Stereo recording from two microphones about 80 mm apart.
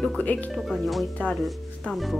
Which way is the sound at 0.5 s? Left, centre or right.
Centre.